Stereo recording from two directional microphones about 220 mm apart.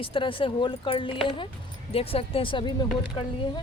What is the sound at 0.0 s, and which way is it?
Speech, 25° left (ahead or behind).